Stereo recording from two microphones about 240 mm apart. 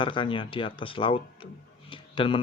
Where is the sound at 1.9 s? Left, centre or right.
Left.